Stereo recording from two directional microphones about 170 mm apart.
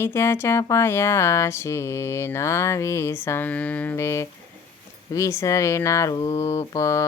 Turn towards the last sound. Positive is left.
turn(degrees=20)  # may be behind; listen again after turning